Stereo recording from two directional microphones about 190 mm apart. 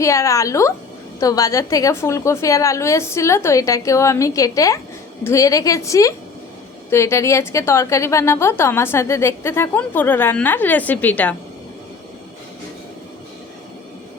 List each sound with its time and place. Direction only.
0.0 s a woman's voice: 15° left (ahead or behind)